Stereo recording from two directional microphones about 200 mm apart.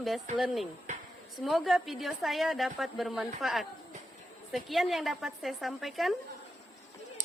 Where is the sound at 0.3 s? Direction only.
Centre (ahead or behind).